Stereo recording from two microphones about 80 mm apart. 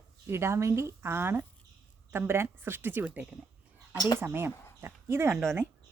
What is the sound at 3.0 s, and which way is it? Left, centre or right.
Speech, centre.